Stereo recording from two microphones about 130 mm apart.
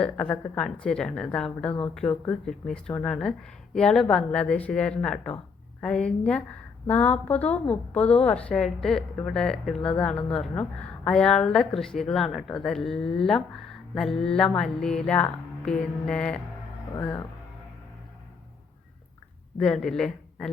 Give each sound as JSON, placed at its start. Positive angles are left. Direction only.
{"t": 0.0, "sound": "a woman's voice", "side_deg": 10}
{"t": 19.5, "sound": "speech", "side_deg": 5}